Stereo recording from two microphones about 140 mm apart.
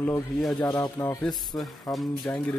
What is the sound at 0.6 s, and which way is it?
Speech, 30° left (ahead or behind).